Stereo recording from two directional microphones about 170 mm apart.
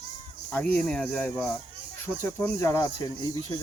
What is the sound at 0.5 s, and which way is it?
Speech, 5° left (ahead or behind).